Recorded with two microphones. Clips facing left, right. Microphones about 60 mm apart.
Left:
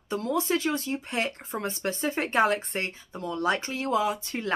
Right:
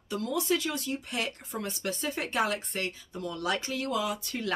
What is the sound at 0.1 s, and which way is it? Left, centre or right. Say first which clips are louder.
Speech: left 3 dB; left.